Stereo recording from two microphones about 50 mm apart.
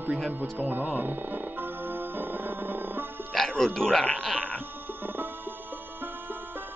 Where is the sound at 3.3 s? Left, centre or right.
Centre.